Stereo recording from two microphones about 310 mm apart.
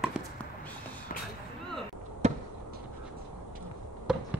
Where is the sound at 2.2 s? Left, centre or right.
Right.